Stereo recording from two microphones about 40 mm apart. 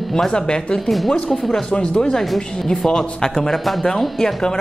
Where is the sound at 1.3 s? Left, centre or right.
Centre.